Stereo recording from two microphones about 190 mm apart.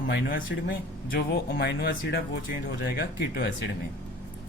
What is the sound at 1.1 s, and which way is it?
Speech, 60° left (ahead or behind).